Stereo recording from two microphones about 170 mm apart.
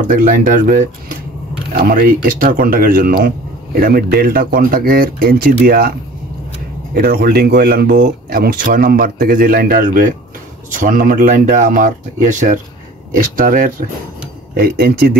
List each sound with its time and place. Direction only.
0.1 s speech: 50° right (ahead or behind)